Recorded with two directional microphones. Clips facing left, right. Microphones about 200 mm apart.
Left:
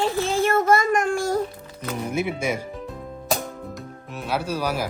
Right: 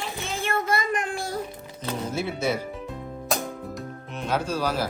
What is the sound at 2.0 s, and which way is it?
Speech, 15° left (ahead or behind).